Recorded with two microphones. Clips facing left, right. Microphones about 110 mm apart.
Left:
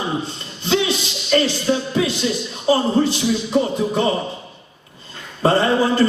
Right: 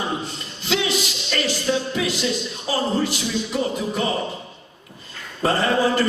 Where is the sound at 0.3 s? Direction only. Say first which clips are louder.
Left 4 dB; 25° left (ahead or behind).